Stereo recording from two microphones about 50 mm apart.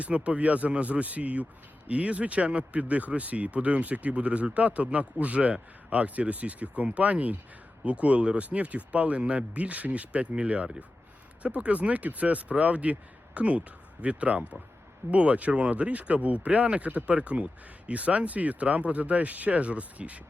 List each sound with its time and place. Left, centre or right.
0.0 s speech: right